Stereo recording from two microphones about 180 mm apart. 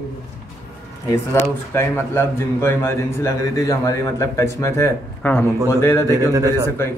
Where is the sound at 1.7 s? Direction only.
15° left (ahead or behind).